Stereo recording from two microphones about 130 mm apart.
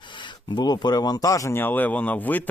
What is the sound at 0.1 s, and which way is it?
Speech, 35° left (ahead or behind).